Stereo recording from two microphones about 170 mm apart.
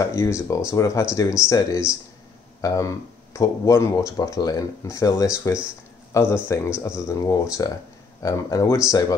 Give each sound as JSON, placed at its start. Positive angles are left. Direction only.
{"t": 0.0, "sound": "speech", "side_deg": 15}